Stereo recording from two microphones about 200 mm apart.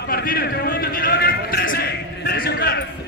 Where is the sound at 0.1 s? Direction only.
45° left (ahead or behind).